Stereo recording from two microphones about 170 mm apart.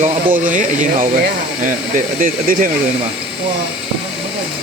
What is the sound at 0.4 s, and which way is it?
Speech, 50° right (ahead or behind).